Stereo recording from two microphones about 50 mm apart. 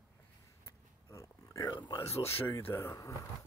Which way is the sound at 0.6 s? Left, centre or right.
Left.